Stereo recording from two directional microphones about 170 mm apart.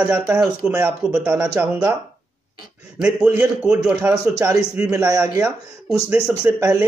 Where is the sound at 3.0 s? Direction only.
5° right (ahead or behind).